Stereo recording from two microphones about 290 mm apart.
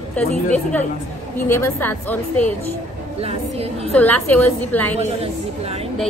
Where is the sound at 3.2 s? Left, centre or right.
Right.